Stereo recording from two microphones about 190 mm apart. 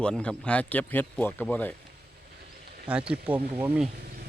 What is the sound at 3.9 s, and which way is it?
Insect, 55° right (ahead or behind).